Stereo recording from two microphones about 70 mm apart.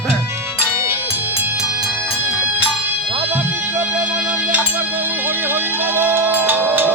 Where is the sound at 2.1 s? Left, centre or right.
Right.